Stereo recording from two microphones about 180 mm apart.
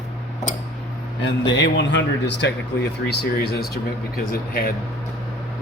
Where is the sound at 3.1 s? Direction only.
65° left (ahead or behind).